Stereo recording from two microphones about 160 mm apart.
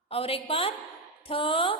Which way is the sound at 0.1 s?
35° left (ahead or behind).